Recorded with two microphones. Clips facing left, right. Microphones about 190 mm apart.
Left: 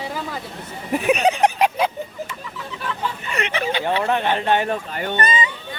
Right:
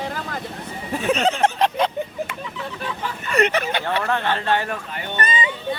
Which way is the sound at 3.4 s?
45° right (ahead or behind).